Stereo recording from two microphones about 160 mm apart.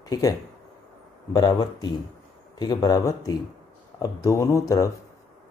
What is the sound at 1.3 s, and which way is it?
Speech, 25° left (ahead or behind).